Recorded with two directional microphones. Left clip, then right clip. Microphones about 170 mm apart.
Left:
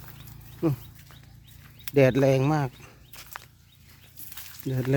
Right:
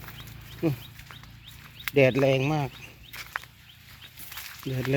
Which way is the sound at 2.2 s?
25° left (ahead or behind).